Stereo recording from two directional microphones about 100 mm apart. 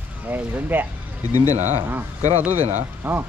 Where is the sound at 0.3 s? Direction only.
20° right (ahead or behind).